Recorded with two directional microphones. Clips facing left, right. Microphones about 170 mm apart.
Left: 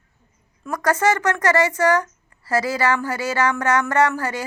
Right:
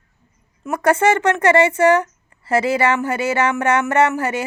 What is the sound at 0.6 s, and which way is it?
Speech, 25° right (ahead or behind).